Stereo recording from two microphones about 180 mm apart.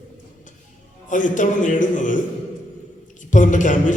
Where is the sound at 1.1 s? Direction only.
45° left (ahead or behind).